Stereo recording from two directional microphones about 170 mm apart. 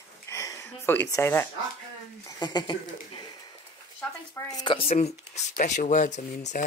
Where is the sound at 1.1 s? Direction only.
15° left (ahead or behind).